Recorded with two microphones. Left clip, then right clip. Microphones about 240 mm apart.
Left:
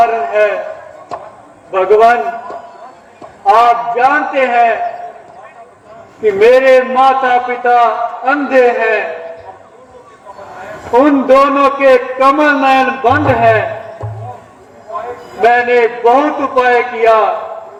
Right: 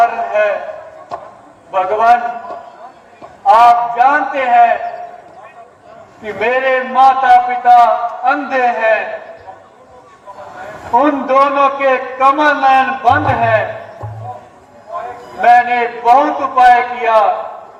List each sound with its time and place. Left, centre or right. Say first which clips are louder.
0.0 s a sound: left 2 dB; left
1.7 s a man's voice: left 3 dB; left
3.5 s a man's voice: right 1 dB; left
6.2 s a man's voice: left 8 dB; left
11.0 s a man's voice: left 4 dB; left
15.4 s a man's voice: even; left